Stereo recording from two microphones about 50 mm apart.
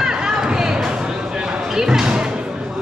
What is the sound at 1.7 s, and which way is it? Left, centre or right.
Music, centre.